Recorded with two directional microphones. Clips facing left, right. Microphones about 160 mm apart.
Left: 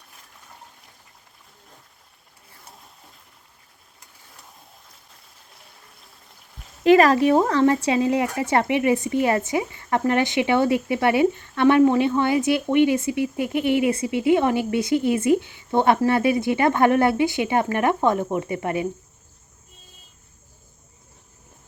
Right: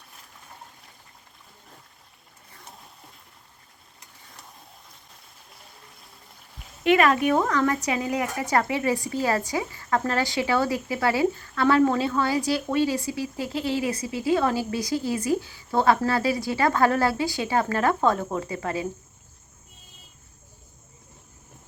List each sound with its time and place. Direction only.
6.8 s speech: 35° left (ahead or behind)